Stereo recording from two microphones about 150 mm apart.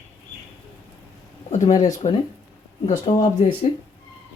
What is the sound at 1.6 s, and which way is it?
Speech, 30° left (ahead or behind).